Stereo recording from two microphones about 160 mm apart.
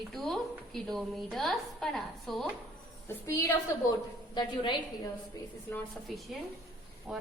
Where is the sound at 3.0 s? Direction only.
20° left (ahead or behind).